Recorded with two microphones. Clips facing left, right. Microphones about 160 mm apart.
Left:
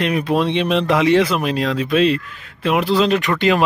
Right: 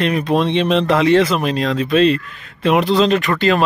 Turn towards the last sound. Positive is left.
turn(degrees=15)  # may be behind; listen again after turning